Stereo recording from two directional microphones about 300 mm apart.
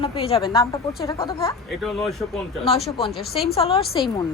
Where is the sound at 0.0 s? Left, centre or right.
Centre.